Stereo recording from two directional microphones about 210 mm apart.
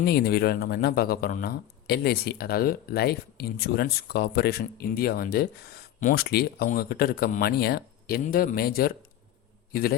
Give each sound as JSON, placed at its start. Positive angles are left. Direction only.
{"t": 0.0, "sound": "speech", "side_deg": 50}